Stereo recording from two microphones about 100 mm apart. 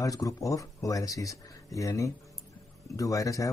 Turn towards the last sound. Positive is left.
turn(degrees=35)  # may be behind; listen again after turning